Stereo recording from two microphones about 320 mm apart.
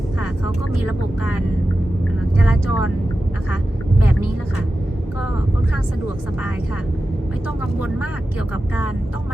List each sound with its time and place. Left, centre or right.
2.6 s speech: left